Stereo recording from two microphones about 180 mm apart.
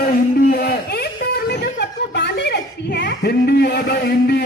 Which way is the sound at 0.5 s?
60° left (ahead or behind).